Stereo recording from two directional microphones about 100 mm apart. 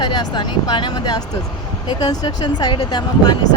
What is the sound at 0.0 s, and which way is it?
Speech, 45° left (ahead or behind).